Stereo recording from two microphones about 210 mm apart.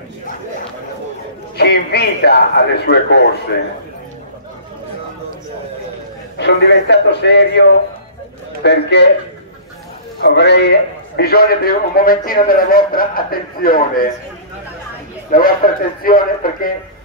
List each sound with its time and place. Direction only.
1.6 s a man's voice: 50° left (ahead or behind)
6.3 s a man's voice: 55° left (ahead or behind)
8.6 s a man's voice: 55° left (ahead or behind)
10.2 s a man's voice: 55° left (ahead or behind)
15.3 s a man's voice: 45° left (ahead or behind)